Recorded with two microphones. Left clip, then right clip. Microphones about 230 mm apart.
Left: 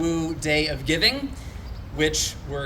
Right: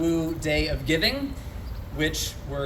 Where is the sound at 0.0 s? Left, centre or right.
Left.